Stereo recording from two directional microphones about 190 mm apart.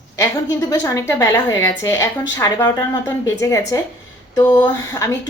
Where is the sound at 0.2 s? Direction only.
15° left (ahead or behind).